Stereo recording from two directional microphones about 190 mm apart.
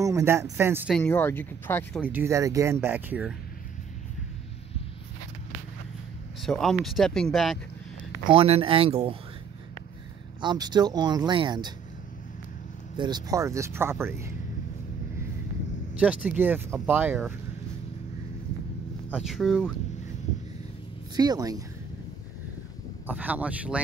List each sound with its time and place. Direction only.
0.0 s speech: 15° right (ahead or behind)
0.9 s speech: 10° left (ahead or behind)
2.0 s speech: 10° right (ahead or behind)
6.4 s speech: centre (ahead or behind)
8.3 s speech: 30° right (ahead or behind)
10.4 s speech: 25° right (ahead or behind)
12.9 s speech: 25° right (ahead or behind)
15.9 s speech: 5° right (ahead or behind)
19.1 s speech: centre (ahead or behind)
21.2 s speech: 20° right (ahead or behind)
23.0 s speech: 10° right (ahead or behind)